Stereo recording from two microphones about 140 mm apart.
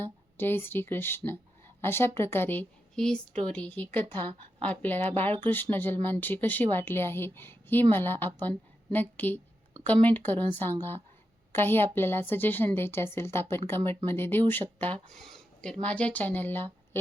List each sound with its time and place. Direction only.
0.0 s speech: 15° left (ahead or behind)